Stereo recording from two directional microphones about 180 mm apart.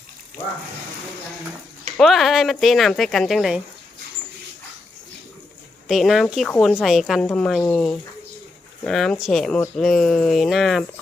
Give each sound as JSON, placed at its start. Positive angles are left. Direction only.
{"t": 2.0, "sound": "speech", "side_deg": 0}
{"t": 5.9, "sound": "speech", "side_deg": 0}